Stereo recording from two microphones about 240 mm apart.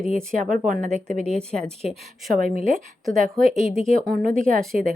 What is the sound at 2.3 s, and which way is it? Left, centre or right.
A woman's voice, right.